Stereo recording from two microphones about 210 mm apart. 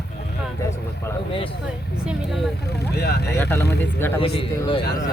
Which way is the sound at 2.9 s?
50° left (ahead or behind).